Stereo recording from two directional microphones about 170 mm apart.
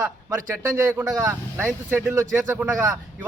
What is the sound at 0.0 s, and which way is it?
A man's voice, 15° right (ahead or behind).